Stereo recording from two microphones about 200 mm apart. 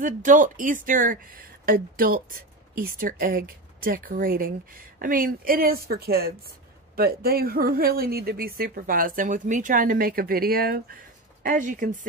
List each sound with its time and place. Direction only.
0.0 s speech: 40° right (ahead or behind)